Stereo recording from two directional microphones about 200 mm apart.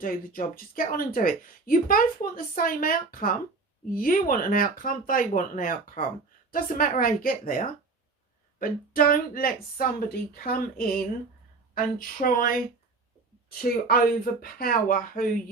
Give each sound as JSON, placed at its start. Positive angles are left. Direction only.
{"t": 0.0, "sound": "speech", "side_deg": 45}